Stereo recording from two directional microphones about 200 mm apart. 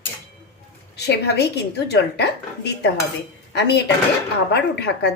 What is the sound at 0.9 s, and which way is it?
A woman's voice, 55° left (ahead or behind).